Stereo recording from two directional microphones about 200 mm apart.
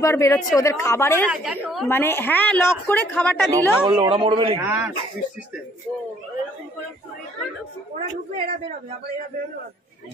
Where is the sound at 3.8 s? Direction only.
25° right (ahead or behind).